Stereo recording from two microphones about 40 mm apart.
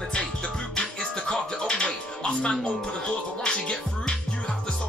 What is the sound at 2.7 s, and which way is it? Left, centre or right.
Speech, left.